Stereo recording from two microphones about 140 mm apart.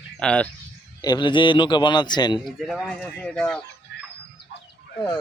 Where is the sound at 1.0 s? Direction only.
30° left (ahead or behind).